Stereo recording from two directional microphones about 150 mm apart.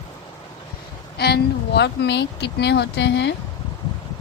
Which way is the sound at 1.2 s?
90° left.